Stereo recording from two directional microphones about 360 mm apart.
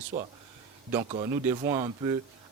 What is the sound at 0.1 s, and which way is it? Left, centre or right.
A man's voice, centre.